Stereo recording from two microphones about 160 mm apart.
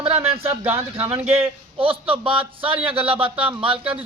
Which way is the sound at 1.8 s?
35° right (ahead or behind).